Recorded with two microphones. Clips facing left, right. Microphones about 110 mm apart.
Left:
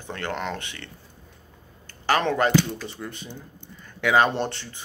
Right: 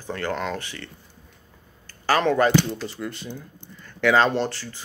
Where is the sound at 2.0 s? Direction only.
20° left (ahead or behind).